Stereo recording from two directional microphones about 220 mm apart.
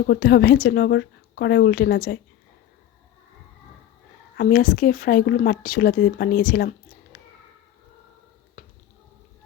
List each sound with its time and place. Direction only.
0.0 s speech: 45° left (ahead or behind)
4.4 s speech: 40° left (ahead or behind)
6.5 s a sound: 40° left (ahead or behind)